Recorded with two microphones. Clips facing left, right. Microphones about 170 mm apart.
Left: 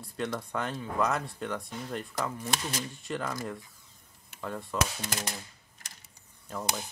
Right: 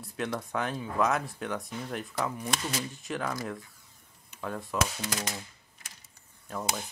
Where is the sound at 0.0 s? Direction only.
Centre (ahead or behind).